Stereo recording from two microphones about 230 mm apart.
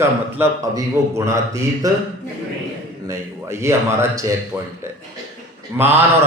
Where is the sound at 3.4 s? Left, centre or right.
Centre.